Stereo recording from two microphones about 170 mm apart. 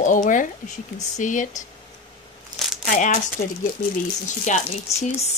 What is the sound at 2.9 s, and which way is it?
Speech, 50° left (ahead or behind).